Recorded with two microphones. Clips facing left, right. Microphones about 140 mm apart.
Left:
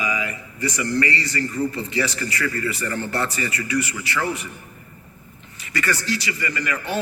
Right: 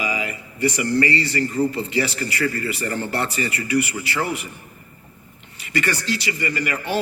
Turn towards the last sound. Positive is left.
turn(degrees=-30)  # may be behind; listen again after turning